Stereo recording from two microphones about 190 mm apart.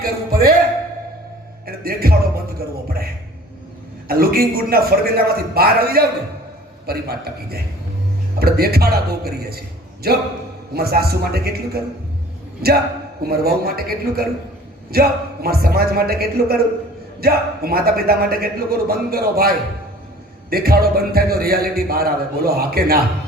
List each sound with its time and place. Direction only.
0.0 s music: 50° right (ahead or behind)
1.6 s music: 50° right (ahead or behind)
2.6 s a man's voice: 55° right (ahead or behind)
4.1 s a man's voice: 50° right (ahead or behind)